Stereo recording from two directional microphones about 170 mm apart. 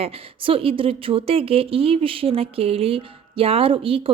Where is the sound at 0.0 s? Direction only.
35° right (ahead or behind).